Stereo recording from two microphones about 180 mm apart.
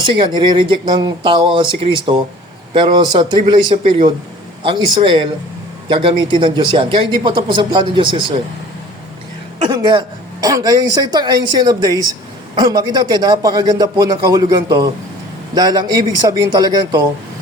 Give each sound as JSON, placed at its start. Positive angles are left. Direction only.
{"t": 0.1, "sound": "speech", "side_deg": -25}
{"t": 9.6, "sound": "speech", "side_deg": -25}